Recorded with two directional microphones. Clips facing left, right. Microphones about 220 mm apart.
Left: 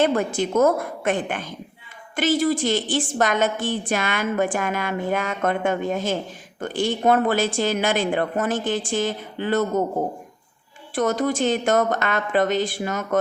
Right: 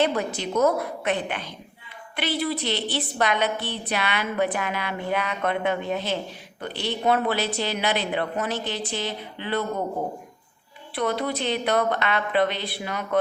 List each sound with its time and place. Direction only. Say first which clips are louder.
0.0 s a woman's voice: left 4 dB; 50° left (ahead or behind)
10.9 s a woman's voice: left 4 dB; 45° left (ahead or behind)